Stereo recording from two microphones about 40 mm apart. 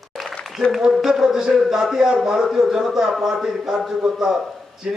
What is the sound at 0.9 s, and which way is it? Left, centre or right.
A man's voice, centre.